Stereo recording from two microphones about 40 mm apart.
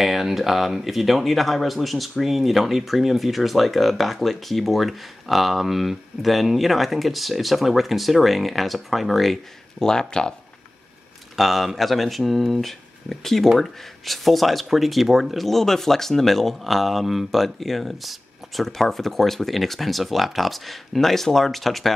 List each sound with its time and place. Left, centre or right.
0.0 s speech: centre
9.8 s speech: centre
11.3 s speech: centre